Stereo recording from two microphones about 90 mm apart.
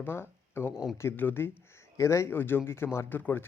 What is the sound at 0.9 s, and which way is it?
Speech, 25° left (ahead or behind).